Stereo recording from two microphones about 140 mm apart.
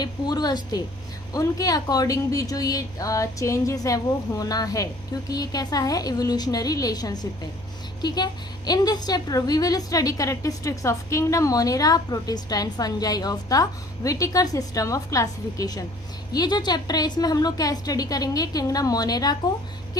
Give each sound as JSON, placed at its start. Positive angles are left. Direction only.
{"t": 0.0, "sound": "a woman's voice", "side_deg": 30}